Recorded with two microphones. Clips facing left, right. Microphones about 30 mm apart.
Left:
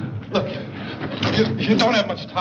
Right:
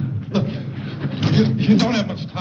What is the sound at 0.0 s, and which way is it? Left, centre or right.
A man's voice, left.